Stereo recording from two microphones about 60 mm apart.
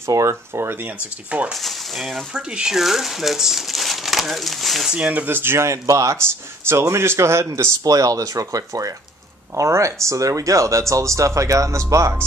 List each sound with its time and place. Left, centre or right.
0.1 s speech: right
1.5 s speech: centre
2.3 s speech: centre
4.9 s speech: centre
5.2 s speech: right
5.7 s speech: right
6.7 s speech: right
7.8 s speech: right
9.6 s speech: right